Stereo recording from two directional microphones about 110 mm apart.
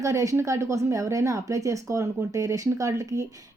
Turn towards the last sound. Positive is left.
turn(degrees=-30)  # may be behind; listen again after turning